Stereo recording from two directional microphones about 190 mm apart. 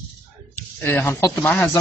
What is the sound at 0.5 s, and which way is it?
Speech, 10° left (ahead or behind).